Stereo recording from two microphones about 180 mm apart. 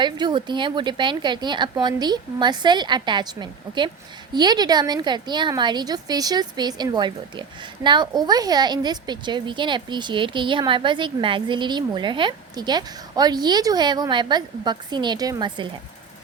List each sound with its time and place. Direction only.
0.0 s a woman's voice: 25° right (ahead or behind)